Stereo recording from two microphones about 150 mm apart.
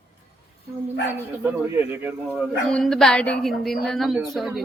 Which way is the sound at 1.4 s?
15° right (ahead or behind).